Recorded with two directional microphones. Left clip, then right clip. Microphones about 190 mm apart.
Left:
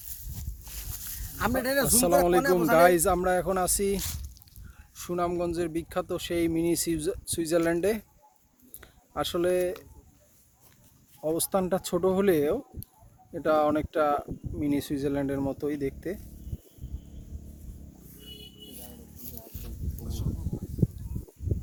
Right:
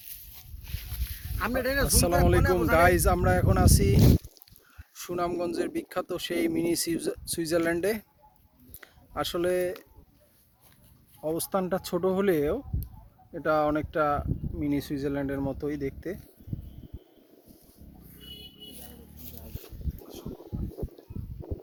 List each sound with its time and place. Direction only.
0.0 s a sound: 30° left (ahead or behind)
1.4 s speech: 70° left (ahead or behind)
1.9 s speech: 5° left (ahead or behind)
4.0 s speech: 15° left (ahead or behind)
4.9 s speech: centre (ahead or behind)
11.2 s speech: 5° left (ahead or behind)